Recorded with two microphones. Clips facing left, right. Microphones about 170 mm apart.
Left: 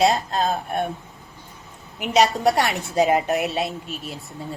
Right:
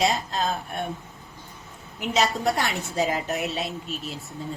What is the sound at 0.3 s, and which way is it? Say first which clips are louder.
Speech: left 5 dB; 55° left (ahead or behind).